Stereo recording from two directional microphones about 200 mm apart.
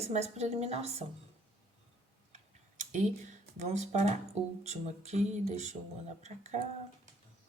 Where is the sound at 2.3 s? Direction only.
40° right (ahead or behind).